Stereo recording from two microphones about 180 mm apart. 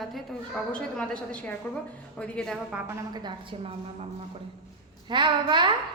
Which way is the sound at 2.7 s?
15° right (ahead or behind).